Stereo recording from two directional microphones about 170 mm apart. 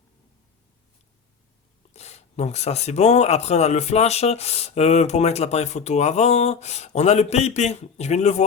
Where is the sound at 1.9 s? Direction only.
40° left (ahead or behind).